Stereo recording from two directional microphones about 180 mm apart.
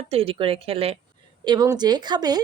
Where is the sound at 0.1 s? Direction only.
30° right (ahead or behind).